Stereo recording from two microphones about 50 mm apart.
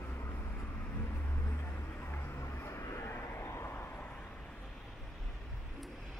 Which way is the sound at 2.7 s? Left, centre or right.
Left.